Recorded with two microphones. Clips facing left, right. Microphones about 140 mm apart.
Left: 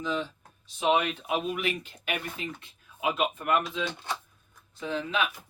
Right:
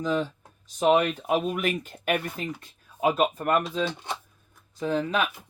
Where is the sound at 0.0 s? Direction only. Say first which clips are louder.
Right 5 dB; 45° right (ahead or behind).